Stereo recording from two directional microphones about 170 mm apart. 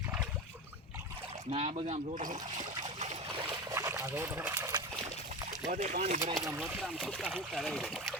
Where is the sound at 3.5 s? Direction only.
20° right (ahead or behind).